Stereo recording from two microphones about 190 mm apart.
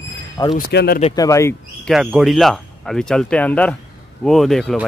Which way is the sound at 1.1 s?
15° left (ahead or behind).